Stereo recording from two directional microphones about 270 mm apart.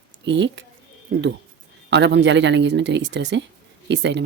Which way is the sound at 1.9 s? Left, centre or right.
Right.